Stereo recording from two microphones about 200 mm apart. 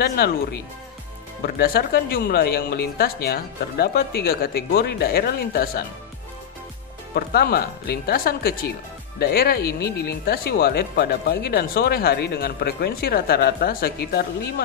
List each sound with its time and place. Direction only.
0.0 s speech: 50° left (ahead or behind)
7.2 s speech: 50° left (ahead or behind)